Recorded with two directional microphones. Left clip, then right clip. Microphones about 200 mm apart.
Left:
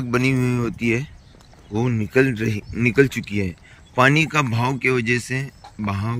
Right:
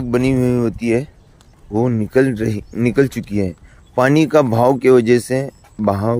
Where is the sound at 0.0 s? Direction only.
20° right (ahead or behind).